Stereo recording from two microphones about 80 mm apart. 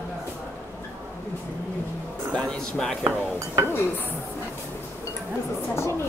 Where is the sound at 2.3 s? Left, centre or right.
Centre.